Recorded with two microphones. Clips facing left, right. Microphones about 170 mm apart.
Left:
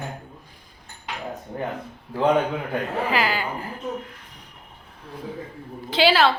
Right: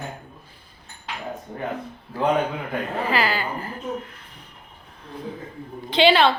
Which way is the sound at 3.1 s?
15° left (ahead or behind).